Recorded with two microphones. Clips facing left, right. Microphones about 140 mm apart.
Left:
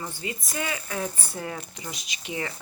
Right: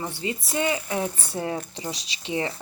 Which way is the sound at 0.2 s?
25° right (ahead or behind).